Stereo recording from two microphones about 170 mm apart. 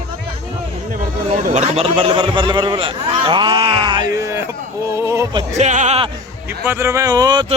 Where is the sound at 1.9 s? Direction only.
30° right (ahead or behind).